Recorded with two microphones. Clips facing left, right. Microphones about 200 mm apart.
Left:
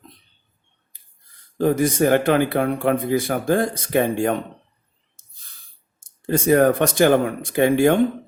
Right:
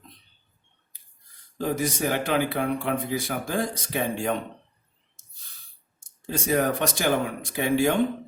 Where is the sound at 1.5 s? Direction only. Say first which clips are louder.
Left 8 dB; 55° left (ahead or behind).